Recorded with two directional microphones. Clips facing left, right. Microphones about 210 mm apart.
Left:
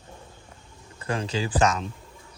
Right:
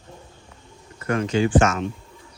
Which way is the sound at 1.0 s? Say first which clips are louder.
Right 7 dB; 30° left (ahead or behind).